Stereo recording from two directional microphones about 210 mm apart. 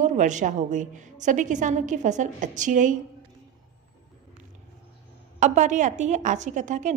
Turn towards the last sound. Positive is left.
turn(degrees=-35)  # may be behind; listen again after turning